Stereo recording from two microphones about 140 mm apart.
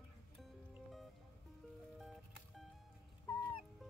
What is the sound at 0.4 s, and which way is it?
Music, centre (ahead or behind).